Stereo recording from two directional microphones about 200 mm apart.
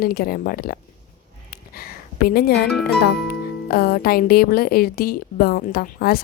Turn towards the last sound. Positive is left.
turn(degrees=50)  # may be behind; listen again after turning